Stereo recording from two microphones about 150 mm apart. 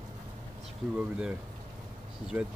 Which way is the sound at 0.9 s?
10° right (ahead or behind).